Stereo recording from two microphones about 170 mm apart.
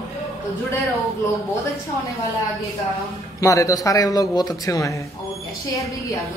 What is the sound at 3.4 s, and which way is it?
A man's voice, 20° left (ahead or behind).